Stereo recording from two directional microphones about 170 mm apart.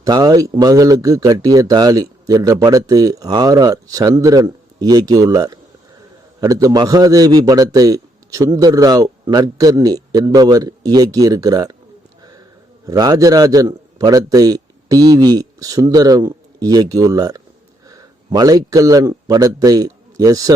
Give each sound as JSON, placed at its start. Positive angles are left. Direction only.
{"t": 0.0, "sound": "a man's voice", "side_deg": -20}
{"t": 12.8, "sound": "a man's voice", "side_deg": -20}